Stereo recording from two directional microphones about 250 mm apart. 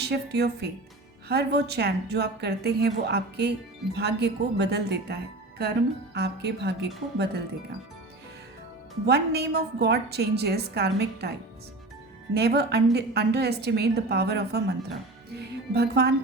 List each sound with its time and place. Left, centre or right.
0.0 s a woman's voice: right
6.1 s a woman's voice: right
9.0 s a woman's voice: right
12.3 s a woman's voice: right